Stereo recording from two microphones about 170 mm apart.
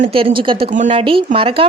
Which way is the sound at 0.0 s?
35° right (ahead or behind).